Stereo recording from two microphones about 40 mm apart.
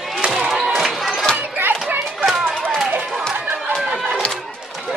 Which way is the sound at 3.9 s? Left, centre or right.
Right.